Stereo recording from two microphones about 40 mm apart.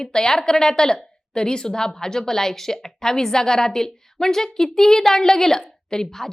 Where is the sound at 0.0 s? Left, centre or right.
Centre.